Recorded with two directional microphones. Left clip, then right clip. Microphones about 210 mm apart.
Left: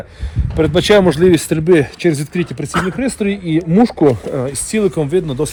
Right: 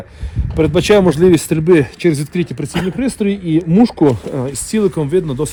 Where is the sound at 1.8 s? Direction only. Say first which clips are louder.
Even; 50° right (ahead or behind).